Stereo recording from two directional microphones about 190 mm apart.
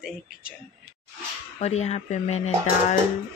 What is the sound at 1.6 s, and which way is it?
Speech, 35° left (ahead or behind).